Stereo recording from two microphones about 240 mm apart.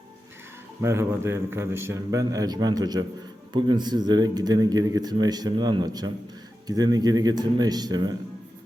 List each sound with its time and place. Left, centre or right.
0.8 s speech: centre